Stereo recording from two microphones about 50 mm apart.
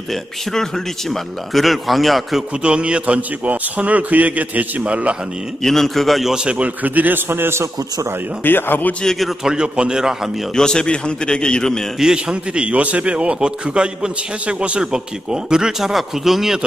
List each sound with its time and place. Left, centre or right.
0.1 s a man's voice: centre
2.6 s a man's voice: right
5.6 s a man's voice: centre
6.3 s a man's voice: right
6.8 s a man's voice: right
8.5 s speech: left
9.0 s a man's voice: centre
9.4 s speech: centre
10.5 s a man's voice: centre
12.0 s a man's voice: centre